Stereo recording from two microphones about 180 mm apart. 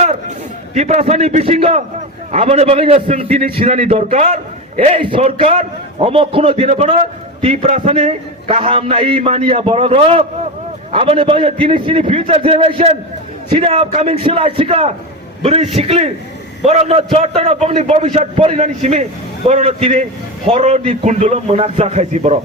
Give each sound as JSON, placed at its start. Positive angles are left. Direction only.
{"t": 0.7, "sound": "a man's voice", "side_deg": -40}